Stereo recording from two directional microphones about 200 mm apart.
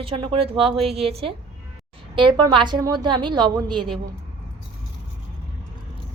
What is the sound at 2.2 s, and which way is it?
A woman's voice, 25° right (ahead or behind).